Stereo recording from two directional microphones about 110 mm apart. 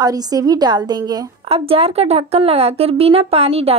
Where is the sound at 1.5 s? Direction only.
60° right (ahead or behind).